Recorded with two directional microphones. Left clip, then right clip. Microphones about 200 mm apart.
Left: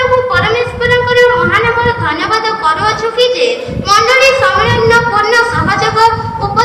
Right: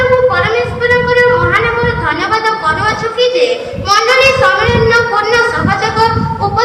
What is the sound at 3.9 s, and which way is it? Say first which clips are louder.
Child singing: left 1 dB; 50° left (ahead or behind).